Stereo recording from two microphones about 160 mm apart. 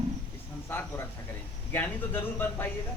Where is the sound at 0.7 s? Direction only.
15° left (ahead or behind).